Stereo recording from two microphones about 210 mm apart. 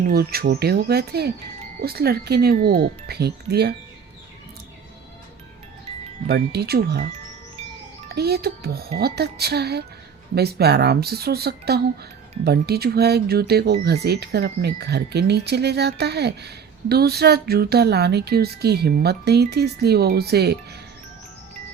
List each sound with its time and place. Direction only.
0.1 s speech: 45° right (ahead or behind)
6.2 s speech: 50° right (ahead or behind)
8.1 s speech: 50° right (ahead or behind)